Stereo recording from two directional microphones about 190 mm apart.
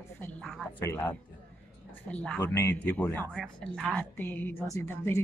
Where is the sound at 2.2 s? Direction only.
10° left (ahead or behind).